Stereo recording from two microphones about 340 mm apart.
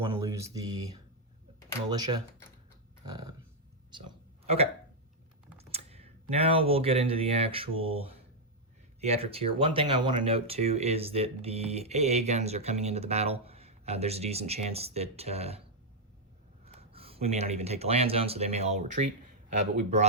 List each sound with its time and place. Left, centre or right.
0.1 s speech: centre
1.9 s speech: centre
5.5 s speech: centre
16.6 s speech: centre